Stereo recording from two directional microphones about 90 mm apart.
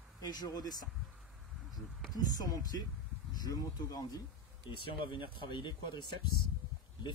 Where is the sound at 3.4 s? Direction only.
40° left (ahead or behind).